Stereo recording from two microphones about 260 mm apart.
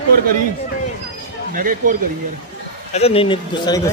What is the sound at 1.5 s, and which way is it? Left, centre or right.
Speech, right.